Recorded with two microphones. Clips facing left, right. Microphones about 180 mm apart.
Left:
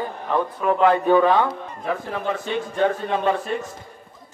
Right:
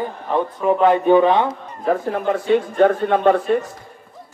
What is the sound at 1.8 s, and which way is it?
A man's voice, 50° right (ahead or behind).